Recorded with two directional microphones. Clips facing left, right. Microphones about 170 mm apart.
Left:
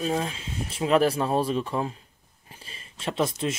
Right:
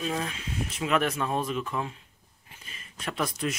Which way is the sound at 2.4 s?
35° left (ahead or behind).